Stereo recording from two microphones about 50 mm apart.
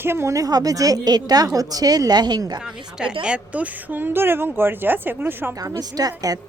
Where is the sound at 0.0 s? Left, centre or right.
Right.